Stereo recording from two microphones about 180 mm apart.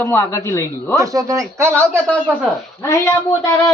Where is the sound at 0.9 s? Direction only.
20° right (ahead or behind).